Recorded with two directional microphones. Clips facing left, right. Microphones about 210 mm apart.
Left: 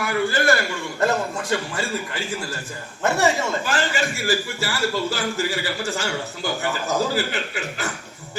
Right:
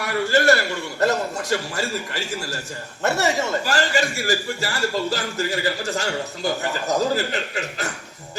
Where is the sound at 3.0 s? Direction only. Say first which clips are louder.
Left 1 dB; 40° right (ahead or behind).